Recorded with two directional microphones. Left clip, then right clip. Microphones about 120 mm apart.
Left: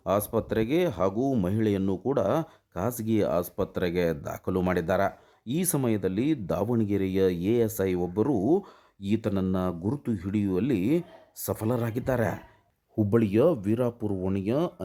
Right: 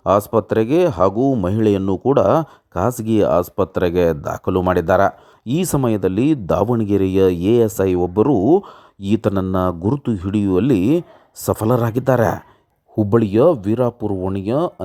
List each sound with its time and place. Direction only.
0.0 s speech: 40° right (ahead or behind)
13.0 s speech: 35° right (ahead or behind)